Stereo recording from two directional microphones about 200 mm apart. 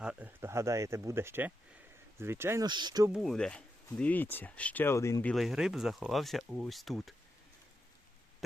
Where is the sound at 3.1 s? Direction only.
Centre (ahead or behind).